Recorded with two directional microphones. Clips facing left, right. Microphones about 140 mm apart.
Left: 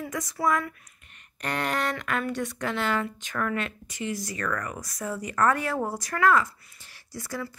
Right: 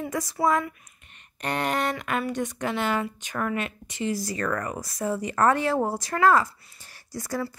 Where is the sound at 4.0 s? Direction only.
35° right (ahead or behind).